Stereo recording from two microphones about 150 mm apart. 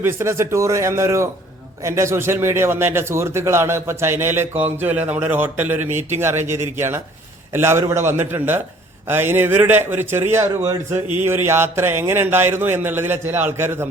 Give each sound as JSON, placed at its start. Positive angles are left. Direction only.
{"t": 0.0, "sound": "a man's voice", "side_deg": -15}